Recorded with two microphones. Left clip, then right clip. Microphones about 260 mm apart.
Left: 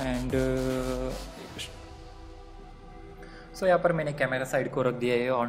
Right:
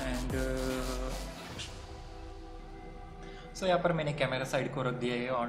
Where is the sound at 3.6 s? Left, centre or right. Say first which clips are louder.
Left 6 dB; centre.